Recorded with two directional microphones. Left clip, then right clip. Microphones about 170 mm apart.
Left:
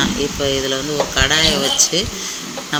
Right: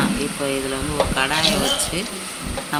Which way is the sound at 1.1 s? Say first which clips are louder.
Left 8 dB; 25° left (ahead or behind).